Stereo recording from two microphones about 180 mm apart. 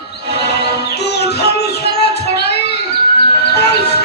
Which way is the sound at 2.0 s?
65° left (ahead or behind).